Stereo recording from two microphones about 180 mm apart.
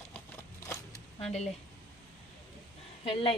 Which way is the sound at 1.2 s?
35° left (ahead or behind).